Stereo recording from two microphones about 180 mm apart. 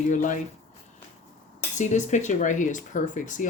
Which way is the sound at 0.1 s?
45° left (ahead or behind).